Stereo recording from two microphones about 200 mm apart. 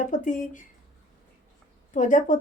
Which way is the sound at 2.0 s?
40° left (ahead or behind).